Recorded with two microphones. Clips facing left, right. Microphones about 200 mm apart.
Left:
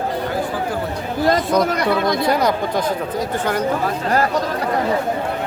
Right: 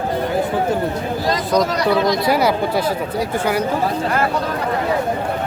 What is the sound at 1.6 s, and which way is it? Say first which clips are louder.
Speech: right 1 dB; 55° left (ahead or behind).